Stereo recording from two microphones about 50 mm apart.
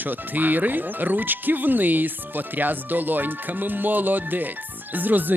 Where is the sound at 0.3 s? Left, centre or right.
Right.